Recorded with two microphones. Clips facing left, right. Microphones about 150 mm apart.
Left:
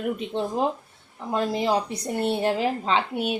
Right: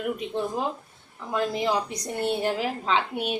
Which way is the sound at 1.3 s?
30° left (ahead or behind).